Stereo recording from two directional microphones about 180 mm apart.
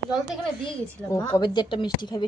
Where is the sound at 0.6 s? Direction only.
15° left (ahead or behind).